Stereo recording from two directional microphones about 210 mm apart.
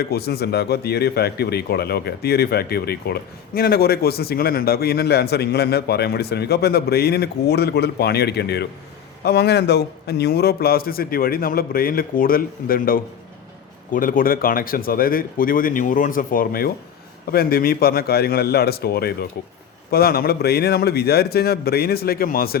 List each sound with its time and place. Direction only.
0.0 s speech: 50° left (ahead or behind)